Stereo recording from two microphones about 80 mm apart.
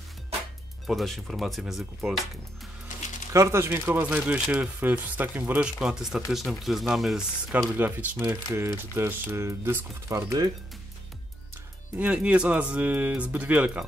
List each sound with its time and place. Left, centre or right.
0.8 s speech: centre
3.3 s speech: right; by 7.2 s centre
7.7 s speech: right
8.3 s speech: right
12.0 s speech: centre